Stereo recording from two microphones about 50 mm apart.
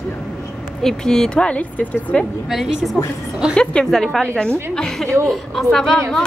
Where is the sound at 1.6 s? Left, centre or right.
Left.